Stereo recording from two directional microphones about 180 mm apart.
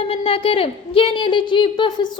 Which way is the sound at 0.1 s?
30° left (ahead or behind).